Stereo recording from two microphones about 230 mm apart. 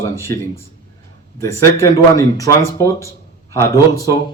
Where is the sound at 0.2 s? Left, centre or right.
Centre.